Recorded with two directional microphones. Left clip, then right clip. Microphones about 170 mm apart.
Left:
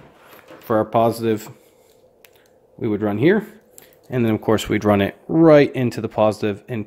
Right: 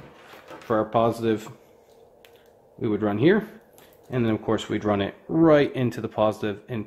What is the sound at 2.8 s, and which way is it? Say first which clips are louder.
Speech: left 3 dB; 30° left (ahead or behind).